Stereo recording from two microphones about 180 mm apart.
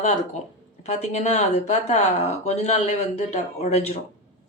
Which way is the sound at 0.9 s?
40° left (ahead or behind).